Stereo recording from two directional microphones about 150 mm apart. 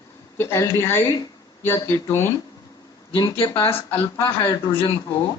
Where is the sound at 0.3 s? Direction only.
15° left (ahead or behind).